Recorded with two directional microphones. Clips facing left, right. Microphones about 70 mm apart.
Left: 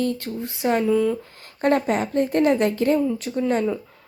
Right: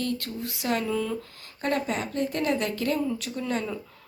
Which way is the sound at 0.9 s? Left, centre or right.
Centre.